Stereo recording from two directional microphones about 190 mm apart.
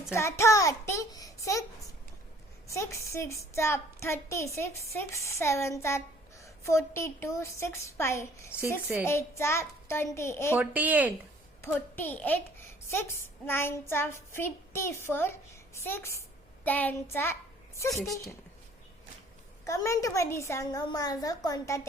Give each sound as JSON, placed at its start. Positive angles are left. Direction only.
{"t": 0.1, "sound": "child singing", "side_deg": 15}
{"t": 2.6, "sound": "a woman's voice", "side_deg": 15}
{"t": 10.6, "sound": "speech", "side_deg": -10}
{"t": 11.6, "sound": "a woman's voice", "side_deg": 10}
{"t": 19.6, "sound": "a woman's voice", "side_deg": 15}